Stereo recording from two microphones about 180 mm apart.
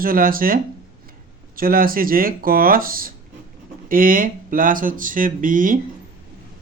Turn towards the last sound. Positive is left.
turn(degrees=-50)  # may be behind; listen again after turning